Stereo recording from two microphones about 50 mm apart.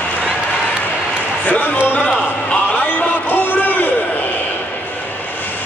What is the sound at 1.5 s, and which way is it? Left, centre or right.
Speech, left.